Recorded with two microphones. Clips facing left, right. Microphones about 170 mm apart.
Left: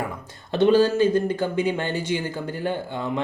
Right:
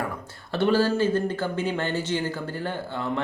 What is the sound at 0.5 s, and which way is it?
Speech, 20° left (ahead or behind).